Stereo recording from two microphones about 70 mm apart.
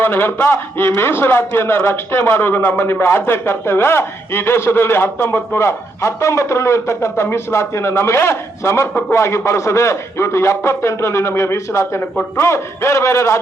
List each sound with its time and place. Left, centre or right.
0.0 s a man's voice: left